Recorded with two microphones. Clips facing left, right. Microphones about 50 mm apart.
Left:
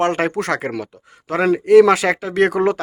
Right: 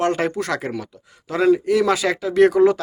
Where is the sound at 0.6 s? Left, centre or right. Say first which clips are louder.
Left 3 dB; left.